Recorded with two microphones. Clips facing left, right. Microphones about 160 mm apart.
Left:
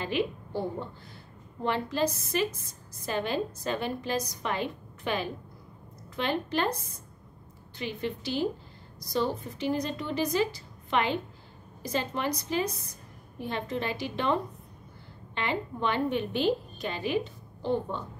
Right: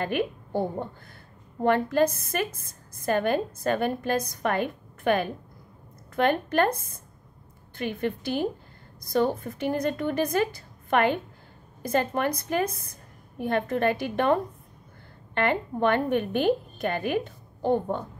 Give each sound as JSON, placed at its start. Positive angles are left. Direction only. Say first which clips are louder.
{"t": 0.0, "sound": "a woman's voice", "louder": "right 2 dB", "side_deg": -55}